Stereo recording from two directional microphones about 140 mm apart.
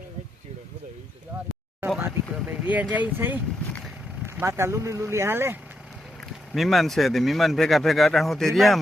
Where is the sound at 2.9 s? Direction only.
10° right (ahead or behind).